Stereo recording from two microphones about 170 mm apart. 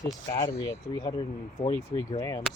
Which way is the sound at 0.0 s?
25° left (ahead or behind).